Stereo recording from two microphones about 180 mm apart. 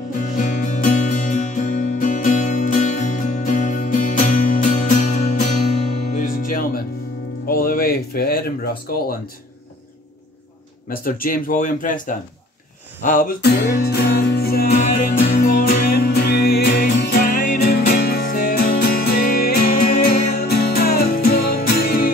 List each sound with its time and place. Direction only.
0.4 s music: 45° left (ahead or behind)
10.9 s speech: 55° left (ahead or behind)
13.0 s music: 50° left (ahead or behind)
14.9 s music: 45° left (ahead or behind)